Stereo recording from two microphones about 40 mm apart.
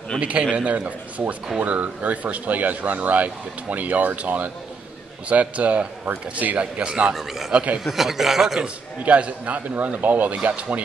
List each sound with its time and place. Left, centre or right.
0.2 s a man's voice: right
7.2 s a man's voice: centre
7.5 s speech: right
7.8 s a man's voice: centre
9.0 s a man's voice: right